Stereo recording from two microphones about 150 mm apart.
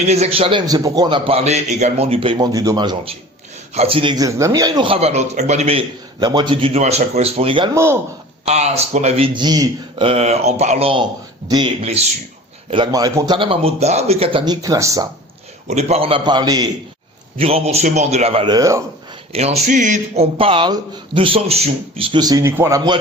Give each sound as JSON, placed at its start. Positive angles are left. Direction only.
{"t": 0.1, "sound": "a man's voice", "side_deg": -45}
{"t": 2.5, "sound": "a man's voice", "side_deg": -25}
{"t": 7.7, "sound": "speech", "side_deg": -15}
{"t": 8.4, "sound": "speech", "side_deg": -45}
{"t": 10.1, "sound": "a man's voice", "side_deg": -45}
{"t": 11.8, "sound": "speech", "side_deg": -40}
{"t": 12.7, "sound": "a man's voice", "side_deg": -30}
{"t": 15.6, "sound": "a man's voice", "side_deg": -45}
{"t": 17.3, "sound": "speech", "side_deg": -40}
{"t": 18.4, "sound": "speech", "side_deg": -25}
{"t": 19.3, "sound": "speech", "side_deg": -45}
{"t": 20.4, "sound": "a man's voice", "side_deg": -35}